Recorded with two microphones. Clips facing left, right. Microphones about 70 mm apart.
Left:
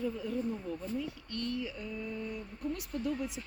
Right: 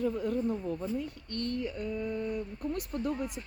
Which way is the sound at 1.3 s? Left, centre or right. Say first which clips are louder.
Right 4 dB; right.